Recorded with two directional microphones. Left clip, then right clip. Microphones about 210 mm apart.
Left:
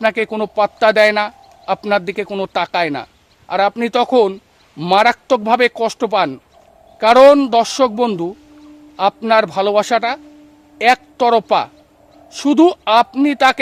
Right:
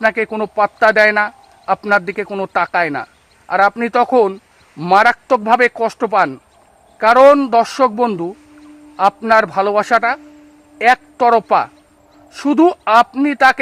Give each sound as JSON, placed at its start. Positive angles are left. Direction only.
{"t": 0.3, "sound": "a man's voice", "side_deg": 0}
{"t": 12.9, "sound": "a man's voice", "side_deg": 5}
{"t": 13.2, "sound": "speech", "side_deg": 15}